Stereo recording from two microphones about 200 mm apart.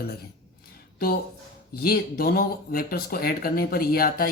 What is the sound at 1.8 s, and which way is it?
Speech, 50° left (ahead or behind).